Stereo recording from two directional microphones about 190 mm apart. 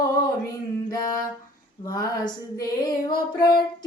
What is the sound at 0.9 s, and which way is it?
Female singing, 20° left (ahead or behind).